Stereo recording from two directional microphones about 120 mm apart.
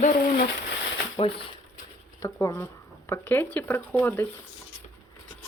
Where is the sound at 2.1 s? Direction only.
25° left (ahead or behind).